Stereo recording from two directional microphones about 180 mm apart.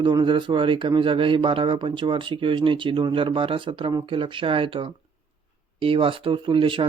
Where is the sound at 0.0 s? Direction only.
25° right (ahead or behind).